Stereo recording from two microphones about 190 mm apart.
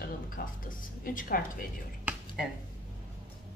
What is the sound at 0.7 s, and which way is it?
Speech, 45° left (ahead or behind).